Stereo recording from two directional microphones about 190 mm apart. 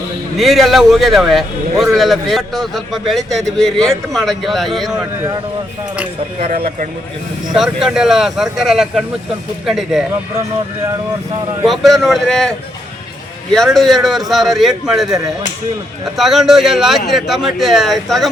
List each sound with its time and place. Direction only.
0.3 s a man's voice: centre (ahead or behind)
7.5 s a man's voice: centre (ahead or behind)
11.6 s a man's voice: centre (ahead or behind)